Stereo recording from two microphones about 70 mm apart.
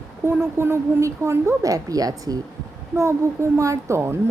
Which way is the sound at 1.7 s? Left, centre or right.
Right.